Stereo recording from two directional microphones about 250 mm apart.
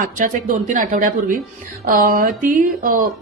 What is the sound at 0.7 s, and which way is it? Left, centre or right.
A woman's voice, right.